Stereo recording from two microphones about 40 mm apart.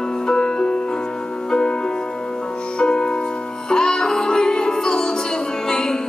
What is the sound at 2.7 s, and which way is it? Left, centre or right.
Music, centre.